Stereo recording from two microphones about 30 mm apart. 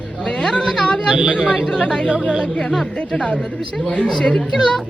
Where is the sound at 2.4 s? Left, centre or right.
Left.